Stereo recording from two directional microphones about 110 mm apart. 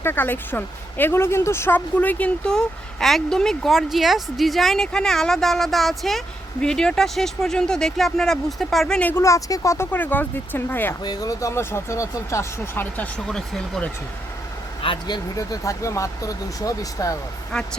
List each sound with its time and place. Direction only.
0.0 s speech: 20° left (ahead or behind); by 9.0 s centre (ahead or behind)
9.0 s speech: 15° left (ahead or behind)
9.2 s speech: 30° left (ahead or behind)
11.0 s speech: 35° left (ahead or behind); by 13.1 s 20° left (ahead or behind)
13.1 s speech: 5° left (ahead or behind)
14.8 s speech: 45° left (ahead or behind)
15.4 s speech: 30° left (ahead or behind)